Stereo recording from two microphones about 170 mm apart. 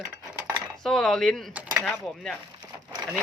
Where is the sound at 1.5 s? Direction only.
10° right (ahead or behind).